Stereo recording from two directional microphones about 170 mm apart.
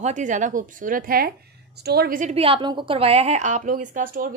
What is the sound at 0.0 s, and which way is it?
A woman's voice, 45° right (ahead or behind).